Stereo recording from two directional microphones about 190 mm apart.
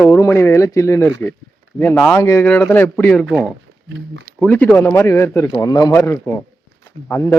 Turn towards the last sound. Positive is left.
turn(degrees=10)  # may be behind; listen again after turning